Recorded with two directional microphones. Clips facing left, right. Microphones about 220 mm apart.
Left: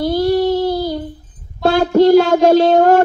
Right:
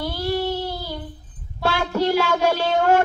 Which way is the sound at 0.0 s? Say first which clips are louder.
Left 10 dB; 40° left (ahead or behind).